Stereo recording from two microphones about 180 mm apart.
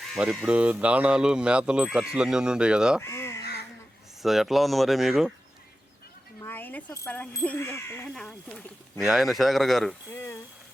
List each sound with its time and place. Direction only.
0.1 s speech: centre (ahead or behind)
3.0 s crow: 15° left (ahead or behind)
4.2 s speech: centre (ahead or behind)
6.4 s speech: 10° left (ahead or behind)
8.1 s speech: 5° left (ahead or behind)